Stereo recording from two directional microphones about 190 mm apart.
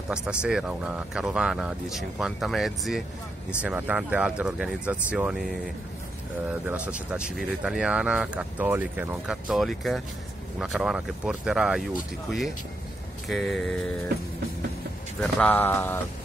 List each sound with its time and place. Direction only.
0.1 s speech: 5° right (ahead or behind)
6.7 s speech: 5° right (ahead or behind)
15.1 s speech: 5° left (ahead or behind)